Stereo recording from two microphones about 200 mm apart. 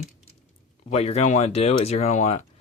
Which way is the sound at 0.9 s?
30° left (ahead or behind).